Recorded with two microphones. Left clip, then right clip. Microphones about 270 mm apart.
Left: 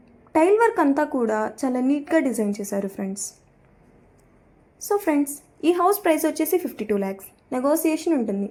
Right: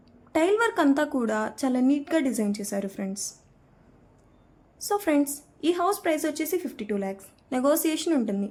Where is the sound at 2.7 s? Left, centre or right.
Centre.